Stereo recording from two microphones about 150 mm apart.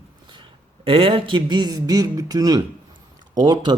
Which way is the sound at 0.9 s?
40° right (ahead or behind).